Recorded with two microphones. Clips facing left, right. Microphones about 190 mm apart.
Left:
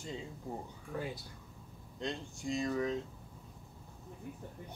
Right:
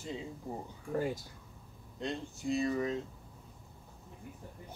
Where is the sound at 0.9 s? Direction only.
45° right (ahead or behind).